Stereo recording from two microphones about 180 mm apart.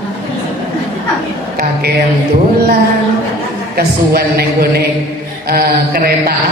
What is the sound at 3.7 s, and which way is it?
Speech, 60° right (ahead or behind).